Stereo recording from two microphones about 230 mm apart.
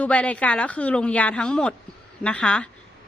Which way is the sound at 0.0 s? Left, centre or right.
Centre.